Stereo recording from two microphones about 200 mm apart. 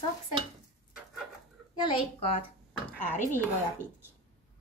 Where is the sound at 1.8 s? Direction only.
25° left (ahead or behind).